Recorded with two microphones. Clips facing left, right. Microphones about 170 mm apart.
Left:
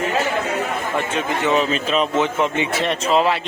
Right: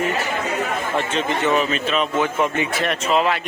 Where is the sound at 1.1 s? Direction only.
15° left (ahead or behind).